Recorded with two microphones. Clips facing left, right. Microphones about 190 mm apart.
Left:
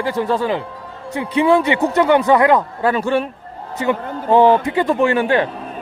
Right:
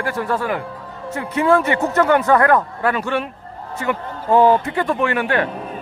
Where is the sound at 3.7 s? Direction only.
20° left (ahead or behind).